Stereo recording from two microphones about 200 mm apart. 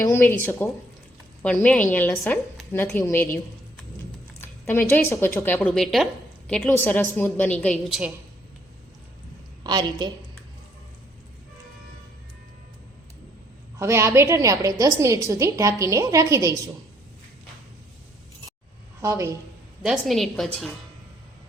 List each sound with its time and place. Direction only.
0.1 s a woman's voice: 10° left (ahead or behind)
4.4 s a sound: 10° left (ahead or behind)
4.9 s a woman's voice: 10° left (ahead or behind)
9.6 s a woman's voice: 20° right (ahead or behind)
13.7 s a woman's voice: 15° right (ahead or behind)
19.0 s a woman's voice: 15° right (ahead or behind)
19.8 s a woman's voice: centre (ahead or behind)